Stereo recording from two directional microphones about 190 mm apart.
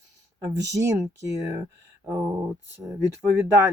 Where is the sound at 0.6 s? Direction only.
15° right (ahead or behind).